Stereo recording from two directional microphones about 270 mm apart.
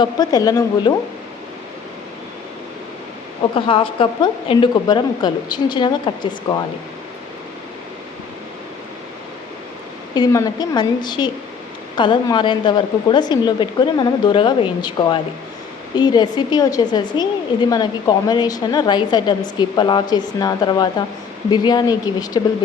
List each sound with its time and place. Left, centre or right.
0.0 s a woman's voice: centre
3.5 s a woman's voice: centre
10.2 s a woman's voice: centre